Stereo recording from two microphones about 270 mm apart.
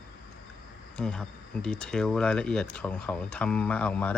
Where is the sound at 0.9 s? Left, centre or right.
Centre.